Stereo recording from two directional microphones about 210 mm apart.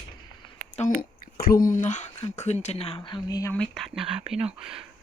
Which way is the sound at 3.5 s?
5° left (ahead or behind).